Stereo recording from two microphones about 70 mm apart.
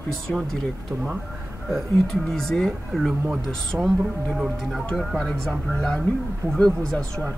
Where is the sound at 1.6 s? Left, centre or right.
Centre.